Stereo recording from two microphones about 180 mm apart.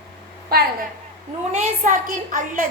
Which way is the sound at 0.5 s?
60° right (ahead or behind).